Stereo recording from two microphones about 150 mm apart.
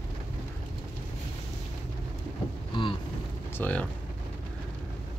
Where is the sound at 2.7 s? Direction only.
35° left (ahead or behind).